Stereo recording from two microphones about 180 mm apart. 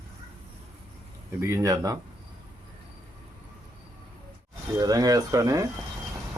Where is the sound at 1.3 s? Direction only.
15° right (ahead or behind).